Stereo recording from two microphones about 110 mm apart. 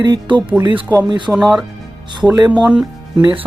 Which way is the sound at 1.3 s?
5° right (ahead or behind).